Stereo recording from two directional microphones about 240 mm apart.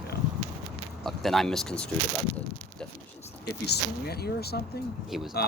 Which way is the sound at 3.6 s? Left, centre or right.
Left.